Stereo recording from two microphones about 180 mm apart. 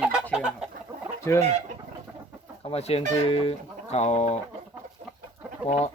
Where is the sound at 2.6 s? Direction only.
35° left (ahead or behind).